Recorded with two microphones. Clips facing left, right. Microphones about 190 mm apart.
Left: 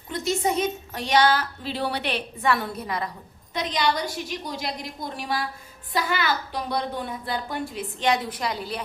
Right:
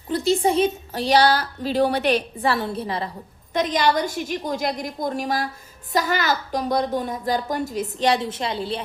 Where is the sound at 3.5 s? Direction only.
45° right (ahead or behind).